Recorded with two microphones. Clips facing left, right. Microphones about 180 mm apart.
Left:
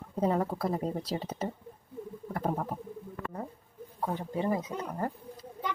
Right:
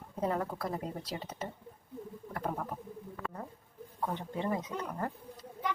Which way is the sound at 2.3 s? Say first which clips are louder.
Left 5 dB; 35° left (ahead or behind).